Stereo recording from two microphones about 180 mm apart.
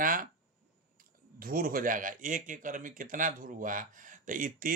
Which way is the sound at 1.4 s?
50° right (ahead or behind).